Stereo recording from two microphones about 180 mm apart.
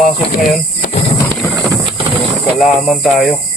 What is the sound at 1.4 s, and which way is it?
Clip-clop, centre (ahead or behind).